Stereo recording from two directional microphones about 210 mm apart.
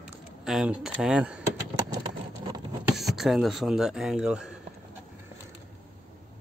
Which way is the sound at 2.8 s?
Centre (ahead or behind).